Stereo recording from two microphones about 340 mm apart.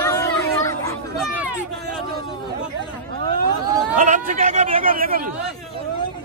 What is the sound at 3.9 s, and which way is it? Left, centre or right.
Speech, right.